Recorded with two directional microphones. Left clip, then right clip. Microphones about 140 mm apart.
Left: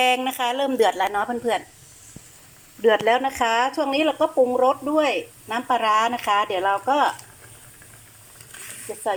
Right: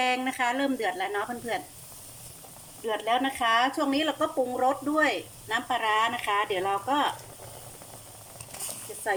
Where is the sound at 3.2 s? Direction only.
15° left (ahead or behind).